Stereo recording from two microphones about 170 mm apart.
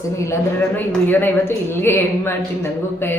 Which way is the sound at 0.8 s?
10° left (ahead or behind).